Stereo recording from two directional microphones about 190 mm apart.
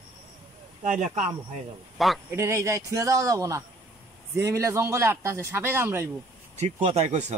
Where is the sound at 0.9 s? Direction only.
40° right (ahead or behind).